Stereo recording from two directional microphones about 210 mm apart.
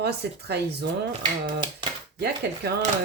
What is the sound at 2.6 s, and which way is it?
Speech, 50° right (ahead or behind).